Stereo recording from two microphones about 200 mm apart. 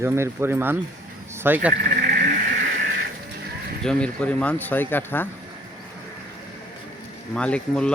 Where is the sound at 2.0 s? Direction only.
55° right (ahead or behind).